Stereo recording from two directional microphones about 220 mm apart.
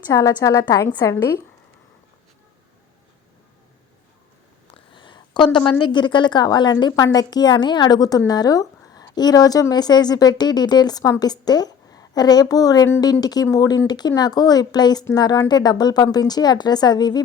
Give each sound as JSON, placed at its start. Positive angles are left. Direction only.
{"t": 0.1, "sound": "a woman's voice", "side_deg": 15}
{"t": 4.7, "sound": "a sound", "side_deg": 20}
{"t": 5.8, "sound": "a woman's voice", "side_deg": 20}